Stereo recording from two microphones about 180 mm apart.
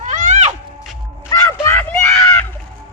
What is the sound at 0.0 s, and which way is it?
Music, 45° right (ahead or behind).